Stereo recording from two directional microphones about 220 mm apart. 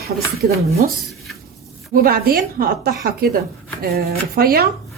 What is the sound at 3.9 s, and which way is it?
Speech, 45° right (ahead or behind).